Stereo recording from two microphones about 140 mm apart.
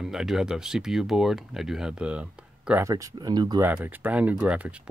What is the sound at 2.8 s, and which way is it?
Speech, 20° right (ahead or behind).